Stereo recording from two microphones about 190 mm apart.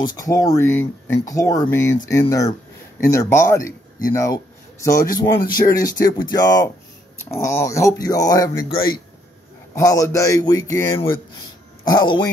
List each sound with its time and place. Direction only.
0.0 s speech: 20° left (ahead or behind)
9.8 s speech: 15° left (ahead or behind)